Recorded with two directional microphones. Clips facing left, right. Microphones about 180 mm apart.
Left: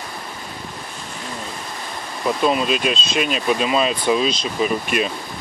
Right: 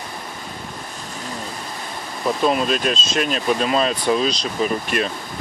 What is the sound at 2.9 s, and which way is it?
Speech, 45° right (ahead or behind).